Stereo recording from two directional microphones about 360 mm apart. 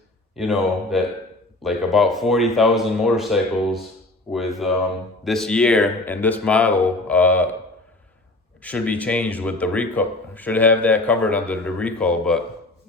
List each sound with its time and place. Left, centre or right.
0.3 s speech: centre
8.6 s speech: centre